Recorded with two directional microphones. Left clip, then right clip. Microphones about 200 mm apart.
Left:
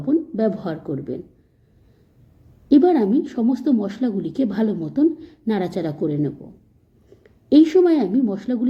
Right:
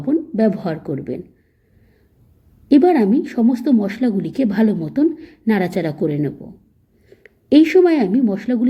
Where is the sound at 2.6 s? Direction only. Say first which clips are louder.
Right 2 dB; 30° right (ahead or behind).